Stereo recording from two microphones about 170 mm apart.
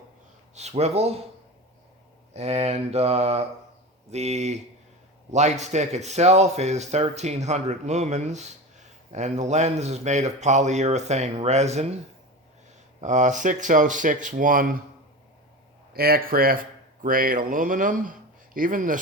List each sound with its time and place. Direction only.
0.5 s speech: 40° right (ahead or behind)
2.3 s speech: 40° right (ahead or behind)
13.0 s speech: 45° right (ahead or behind)
15.9 s speech: 65° right (ahead or behind)